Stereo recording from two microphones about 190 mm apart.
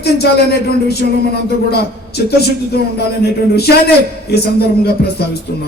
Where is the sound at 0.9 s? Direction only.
55° left (ahead or behind).